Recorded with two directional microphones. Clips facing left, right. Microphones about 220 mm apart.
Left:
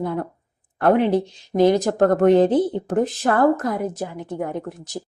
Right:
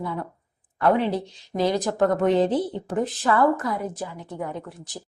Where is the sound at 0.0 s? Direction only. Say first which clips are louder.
Left 6 dB; 50° left (ahead or behind).